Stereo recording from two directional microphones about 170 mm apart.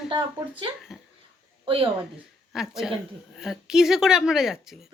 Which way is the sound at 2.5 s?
Centre (ahead or behind).